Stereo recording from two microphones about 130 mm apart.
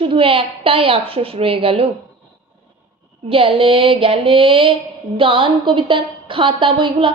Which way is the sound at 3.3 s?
45° right (ahead or behind).